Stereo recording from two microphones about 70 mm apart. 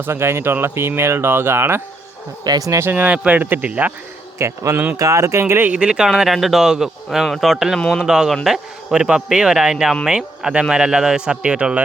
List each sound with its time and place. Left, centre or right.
0.0 s speech: right
2.4 s speech: right
2.8 s speech: right
4.4 s speech: right
5.6 s speech: centre
7.8 s speech: centre
8.0 s a man's voice: centre